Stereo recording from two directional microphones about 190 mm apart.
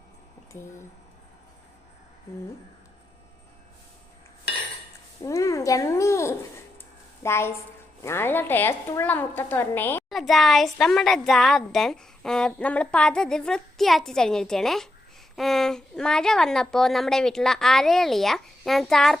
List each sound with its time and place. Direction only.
5.2 s a woman's voice: 15° left (ahead or behind)
6.7 s a sound: 15° left (ahead or behind)
8.0 s a woman's voice: 15° left (ahead or behind)
10.1 s a woman's voice: centre (ahead or behind)